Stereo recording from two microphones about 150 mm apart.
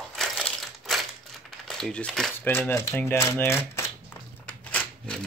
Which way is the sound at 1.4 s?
5° left (ahead or behind).